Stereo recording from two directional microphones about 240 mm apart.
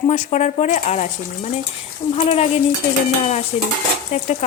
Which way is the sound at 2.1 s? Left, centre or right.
Left.